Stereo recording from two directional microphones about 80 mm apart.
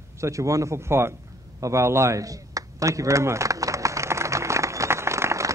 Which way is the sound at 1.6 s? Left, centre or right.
Right.